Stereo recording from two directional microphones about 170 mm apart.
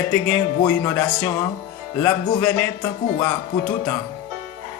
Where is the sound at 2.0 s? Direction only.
15° left (ahead or behind).